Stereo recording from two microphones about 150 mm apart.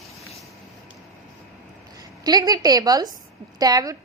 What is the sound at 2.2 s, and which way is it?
Speech, 25° right (ahead or behind).